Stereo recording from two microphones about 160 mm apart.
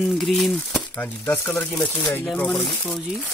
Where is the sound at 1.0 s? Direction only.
15° left (ahead or behind).